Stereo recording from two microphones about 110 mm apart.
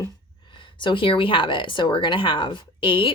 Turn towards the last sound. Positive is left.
turn(degrees=50)  # may be behind; listen again after turning